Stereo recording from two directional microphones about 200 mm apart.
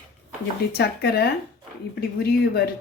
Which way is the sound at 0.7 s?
55° left (ahead or behind).